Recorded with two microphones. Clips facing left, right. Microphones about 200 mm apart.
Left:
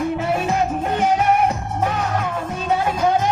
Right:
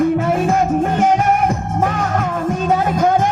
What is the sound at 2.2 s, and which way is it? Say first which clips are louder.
Music: right 6 dB; 45° right (ahead or behind).